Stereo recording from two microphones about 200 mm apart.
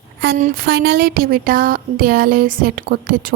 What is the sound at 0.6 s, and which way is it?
Speech, 55° right (ahead or behind).